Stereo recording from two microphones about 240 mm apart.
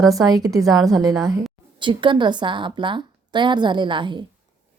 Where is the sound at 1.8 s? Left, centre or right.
Centre.